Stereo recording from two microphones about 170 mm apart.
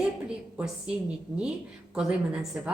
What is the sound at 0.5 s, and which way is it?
A woman's voice, 5° right (ahead or behind).